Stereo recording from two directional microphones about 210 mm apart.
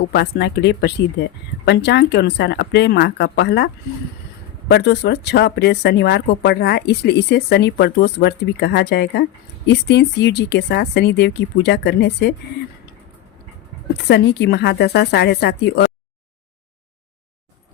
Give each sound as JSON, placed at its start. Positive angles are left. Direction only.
{"t": 0.1, "sound": "speech", "side_deg": 50}
{"t": 4.7, "sound": "speech", "side_deg": 55}
{"t": 14.1, "sound": "speech", "side_deg": 50}